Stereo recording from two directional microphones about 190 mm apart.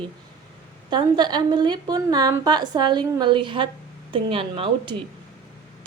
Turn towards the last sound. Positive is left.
turn(degrees=-30)  # may be behind; listen again after turning